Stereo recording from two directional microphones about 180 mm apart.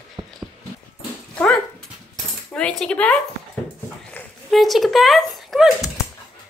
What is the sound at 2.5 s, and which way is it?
Speech, 5° left (ahead or behind).